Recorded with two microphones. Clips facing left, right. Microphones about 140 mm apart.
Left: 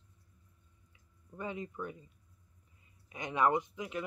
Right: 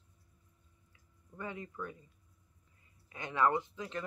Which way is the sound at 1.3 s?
20° left (ahead or behind).